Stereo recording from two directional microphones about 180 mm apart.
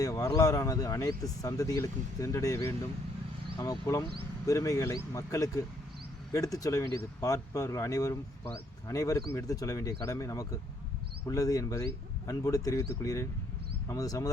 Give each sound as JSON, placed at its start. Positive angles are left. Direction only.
{"t": 0.0, "sound": "speech", "side_deg": 20}